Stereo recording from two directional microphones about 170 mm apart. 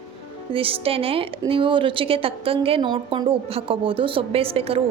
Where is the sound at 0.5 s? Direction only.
35° right (ahead or behind).